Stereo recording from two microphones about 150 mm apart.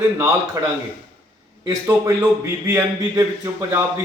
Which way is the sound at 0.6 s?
20° right (ahead or behind).